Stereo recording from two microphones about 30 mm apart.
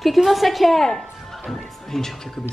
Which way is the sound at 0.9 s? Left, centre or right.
Centre.